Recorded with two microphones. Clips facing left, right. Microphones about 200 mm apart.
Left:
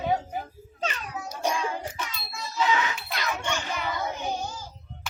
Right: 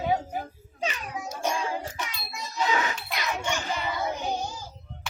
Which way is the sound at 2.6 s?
40° right (ahead or behind).